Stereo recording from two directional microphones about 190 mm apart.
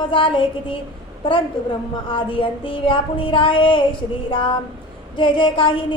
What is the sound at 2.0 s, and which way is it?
Speech, 25° left (ahead or behind).